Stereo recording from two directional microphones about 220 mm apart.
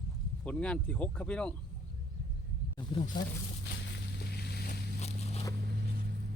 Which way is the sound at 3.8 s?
50° left (ahead or behind).